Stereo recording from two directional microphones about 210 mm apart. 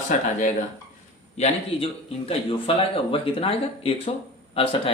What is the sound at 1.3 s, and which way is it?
A man's voice, 30° left (ahead or behind).